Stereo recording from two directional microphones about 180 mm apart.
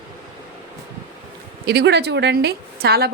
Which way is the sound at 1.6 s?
65° right (ahead or behind).